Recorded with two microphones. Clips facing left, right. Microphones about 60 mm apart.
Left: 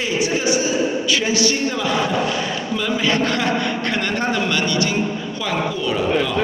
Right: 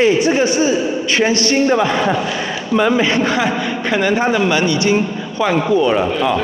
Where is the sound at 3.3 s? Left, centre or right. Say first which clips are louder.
Right 3 dB; centre; by 6.1 s right.